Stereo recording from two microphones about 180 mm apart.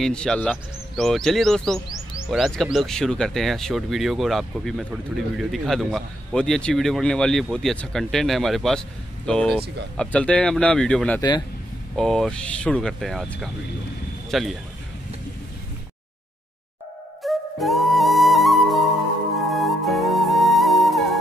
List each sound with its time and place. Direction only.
0.0 s speech: 5° left (ahead or behind)
11.1 s speech: 25° left (ahead or behind)
12.0 s speech: centre (ahead or behind)
17.2 s music: centre (ahead or behind)